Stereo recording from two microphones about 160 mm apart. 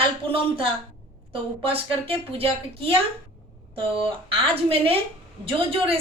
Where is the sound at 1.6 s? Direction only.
35° right (ahead or behind).